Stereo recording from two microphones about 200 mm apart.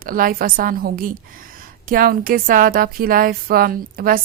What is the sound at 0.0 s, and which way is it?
A woman's voice, 45° right (ahead or behind).